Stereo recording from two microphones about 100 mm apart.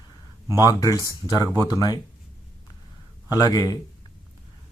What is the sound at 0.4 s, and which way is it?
Speech, 30° right (ahead or behind).